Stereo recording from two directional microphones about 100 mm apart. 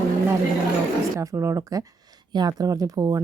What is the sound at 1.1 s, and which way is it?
Speech, 30° right (ahead or behind).